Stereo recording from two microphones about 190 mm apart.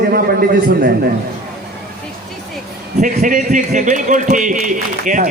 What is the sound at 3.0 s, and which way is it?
A man's voice, 45° right (ahead or behind).